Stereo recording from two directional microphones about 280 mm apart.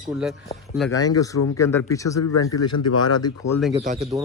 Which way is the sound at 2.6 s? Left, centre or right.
Left.